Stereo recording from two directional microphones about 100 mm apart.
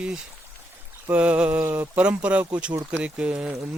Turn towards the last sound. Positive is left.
turn(degrees=-10)  # may be behind; listen again after turning